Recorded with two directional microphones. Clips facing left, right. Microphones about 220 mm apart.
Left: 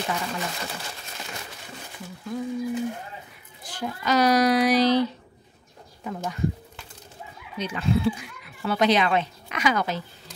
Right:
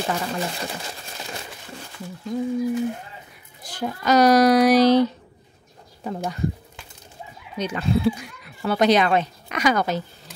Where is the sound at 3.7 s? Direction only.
40° right (ahead or behind).